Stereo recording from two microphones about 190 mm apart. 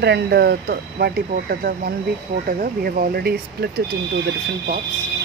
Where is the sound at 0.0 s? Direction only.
60° right (ahead or behind).